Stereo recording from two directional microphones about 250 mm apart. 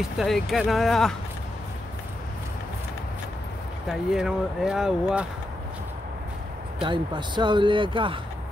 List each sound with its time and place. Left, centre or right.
0.2 s speech: centre
4.1 s speech: centre
6.8 s speech: centre